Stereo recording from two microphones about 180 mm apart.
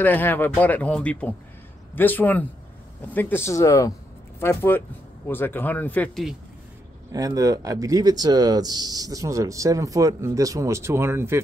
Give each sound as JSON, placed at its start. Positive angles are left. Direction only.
{"t": 0.0, "sound": "speech", "side_deg": 10}
{"t": 7.1, "sound": "speech", "side_deg": -20}